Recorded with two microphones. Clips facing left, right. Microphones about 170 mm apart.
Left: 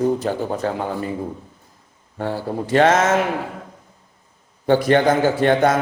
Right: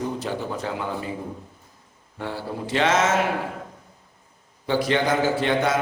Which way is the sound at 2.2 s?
45° left (ahead or behind).